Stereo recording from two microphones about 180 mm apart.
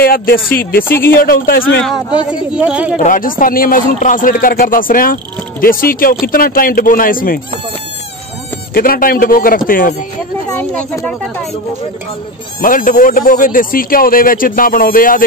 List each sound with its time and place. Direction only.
0.0 s speech: 55° left (ahead or behind)
2.5 s a woman's voice: 5° right (ahead or behind)
3.0 s speech: 50° left (ahead or behind)
8.7 s speech: 55° left (ahead or behind)
10.6 s speech: 10° left (ahead or behind)
12.6 s speech: 50° left (ahead or behind)